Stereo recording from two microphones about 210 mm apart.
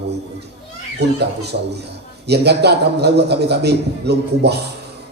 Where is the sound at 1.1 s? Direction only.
50° right (ahead or behind).